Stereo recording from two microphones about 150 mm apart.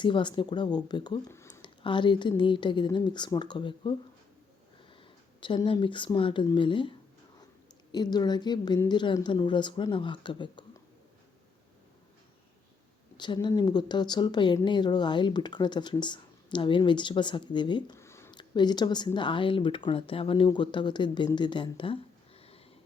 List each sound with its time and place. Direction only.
0.0 s speech: 30° left (ahead or behind)
1.3 s a sound: 20° left (ahead or behind)
1.6 s speech: 35° left (ahead or behind)
5.6 s speech: 35° left (ahead or behind)
7.9 s speech: 25° left (ahead or behind)
13.1 s speech: 30° left (ahead or behind)
17.9 s a sound: 20° left (ahead or behind)
18.3 s speech: 30° left (ahead or behind)
22.4 s a sound: 40° left (ahead or behind)